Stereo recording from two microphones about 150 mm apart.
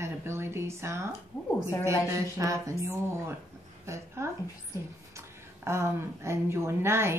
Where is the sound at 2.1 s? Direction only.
20° right (ahead or behind).